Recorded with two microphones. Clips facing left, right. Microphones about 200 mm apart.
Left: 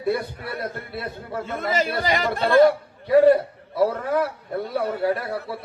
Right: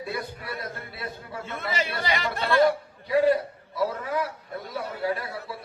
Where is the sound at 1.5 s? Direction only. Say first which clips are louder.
Left 6 dB; 40° left (ahead or behind).